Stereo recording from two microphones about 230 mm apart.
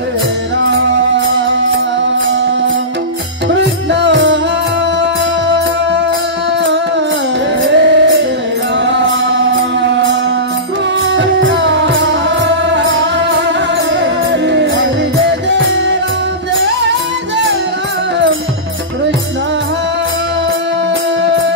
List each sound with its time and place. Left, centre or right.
3.5 s music: right
7.6 s music: right
11.1 s music: right
14.5 s music: right